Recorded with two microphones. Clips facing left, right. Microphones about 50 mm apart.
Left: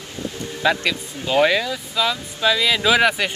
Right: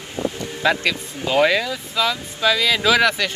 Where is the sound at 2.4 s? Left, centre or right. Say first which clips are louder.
Even; centre.